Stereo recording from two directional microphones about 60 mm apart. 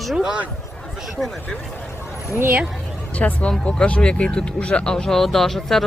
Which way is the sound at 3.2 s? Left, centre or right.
Left.